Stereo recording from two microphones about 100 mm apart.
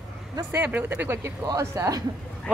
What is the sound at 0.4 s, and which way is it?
Speech, 25° right (ahead or behind).